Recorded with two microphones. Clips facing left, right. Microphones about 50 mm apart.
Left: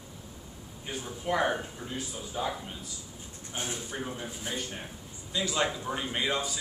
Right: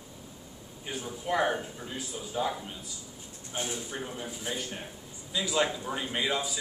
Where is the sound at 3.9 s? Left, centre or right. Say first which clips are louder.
Left 1 dB; centre.